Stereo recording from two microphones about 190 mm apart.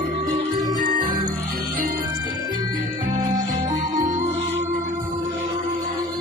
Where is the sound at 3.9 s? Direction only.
40° right (ahead or behind).